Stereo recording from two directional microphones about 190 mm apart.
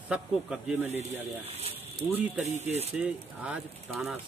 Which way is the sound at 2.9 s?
5° right (ahead or behind).